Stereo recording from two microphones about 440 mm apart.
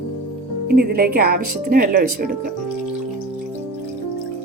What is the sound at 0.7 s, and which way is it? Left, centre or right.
Speech, right.